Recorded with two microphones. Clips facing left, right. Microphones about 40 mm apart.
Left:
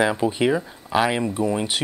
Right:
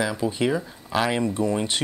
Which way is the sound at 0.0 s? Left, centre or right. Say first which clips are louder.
Left 4 dB; left.